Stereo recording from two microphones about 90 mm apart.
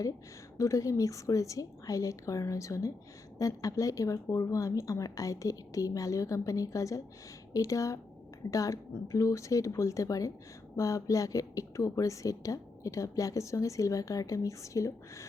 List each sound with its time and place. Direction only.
0.5 s a woman's voice: 35° left (ahead or behind)